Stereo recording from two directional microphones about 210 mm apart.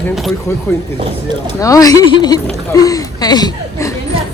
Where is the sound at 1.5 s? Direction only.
15° left (ahead or behind).